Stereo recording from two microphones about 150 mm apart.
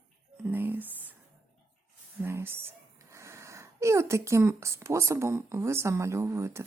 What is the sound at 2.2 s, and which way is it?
Speech, 15° right (ahead or behind).